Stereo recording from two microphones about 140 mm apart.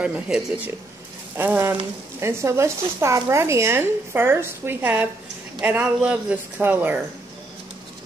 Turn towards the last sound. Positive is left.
turn(degrees=-15)  # may be behind; listen again after turning